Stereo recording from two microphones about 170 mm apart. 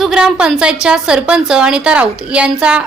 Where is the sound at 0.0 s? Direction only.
5° right (ahead or behind).